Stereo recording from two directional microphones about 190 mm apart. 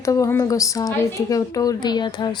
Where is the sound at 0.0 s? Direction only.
15° left (ahead or behind).